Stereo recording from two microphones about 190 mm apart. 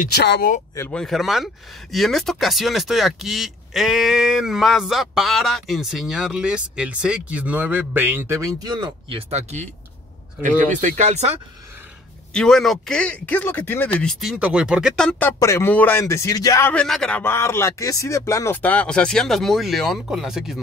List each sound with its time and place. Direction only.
0.0 s speech: 60° left (ahead or behind)
0.7 s speech: 10° left (ahead or behind); by 9.2 s 20° right (ahead or behind)
9.3 s speech: 35° right (ahead or behind)
10.7 s speech: 40° right (ahead or behind)
12.4 s speech: centre (ahead or behind)